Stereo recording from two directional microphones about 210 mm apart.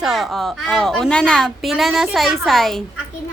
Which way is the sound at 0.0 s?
Centre (ahead or behind).